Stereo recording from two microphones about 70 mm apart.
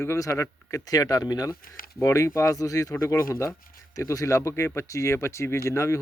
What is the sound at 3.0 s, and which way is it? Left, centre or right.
Speech, left.